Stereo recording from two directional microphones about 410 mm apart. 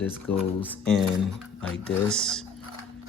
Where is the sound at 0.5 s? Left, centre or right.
Centre.